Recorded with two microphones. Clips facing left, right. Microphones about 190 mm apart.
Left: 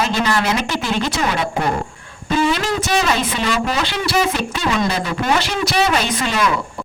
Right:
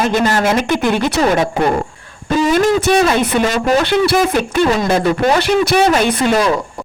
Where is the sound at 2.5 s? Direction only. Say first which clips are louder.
Right 7 dB; 55° right (ahead or behind).